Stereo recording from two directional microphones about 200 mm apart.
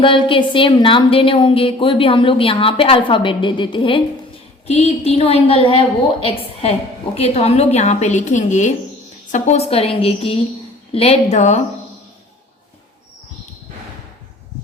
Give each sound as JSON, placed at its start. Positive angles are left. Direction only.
{"t": 0.0, "sound": "a woman's voice", "side_deg": 25}